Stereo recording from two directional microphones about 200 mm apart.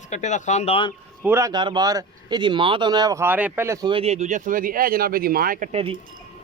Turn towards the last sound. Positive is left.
turn(degrees=-30)  # may be behind; listen again after turning